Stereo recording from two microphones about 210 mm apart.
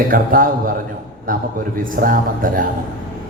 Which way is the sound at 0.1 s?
40° right (ahead or behind).